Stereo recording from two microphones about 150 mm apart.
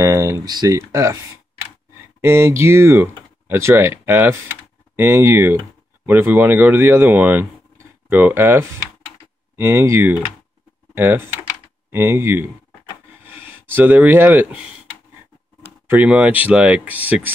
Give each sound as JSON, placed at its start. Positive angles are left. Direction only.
{"t": 0.0, "sound": "speech", "side_deg": -20}
{"t": 2.2, "sound": "speech", "side_deg": -15}
{"t": 15.9, "sound": "speech", "side_deg": -10}